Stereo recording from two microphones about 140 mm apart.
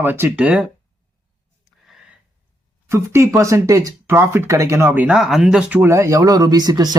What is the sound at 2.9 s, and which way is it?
Speech, 20° right (ahead or behind).